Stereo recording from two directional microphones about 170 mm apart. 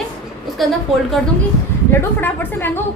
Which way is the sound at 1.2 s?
Centre (ahead or behind).